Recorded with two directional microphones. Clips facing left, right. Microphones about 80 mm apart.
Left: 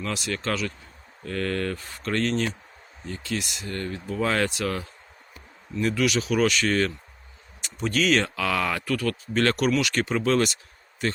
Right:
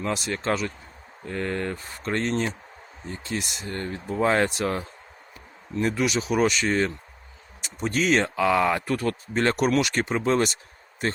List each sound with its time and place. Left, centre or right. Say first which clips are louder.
0.0 s speech: right 2 dB; right